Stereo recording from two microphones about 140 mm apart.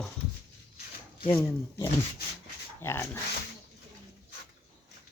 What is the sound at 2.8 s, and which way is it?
Speech, 15° left (ahead or behind).